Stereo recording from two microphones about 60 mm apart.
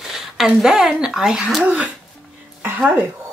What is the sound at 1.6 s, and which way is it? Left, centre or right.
Speech, right.